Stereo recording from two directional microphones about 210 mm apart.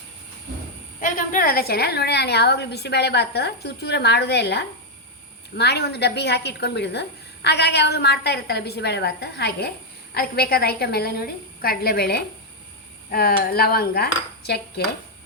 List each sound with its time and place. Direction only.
0.9 s a woman's voice: 40° left (ahead or behind)